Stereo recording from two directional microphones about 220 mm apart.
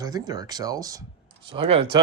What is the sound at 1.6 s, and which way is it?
Speech, 25° right (ahead or behind).